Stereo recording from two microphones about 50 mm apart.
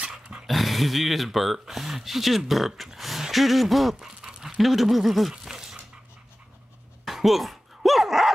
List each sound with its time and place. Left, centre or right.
0.0 s dog: centre
0.5 s speech: centre
4.2 s dog: centre
4.6 s speech: centre
5.3 s dog: centre
7.1 s dog: centre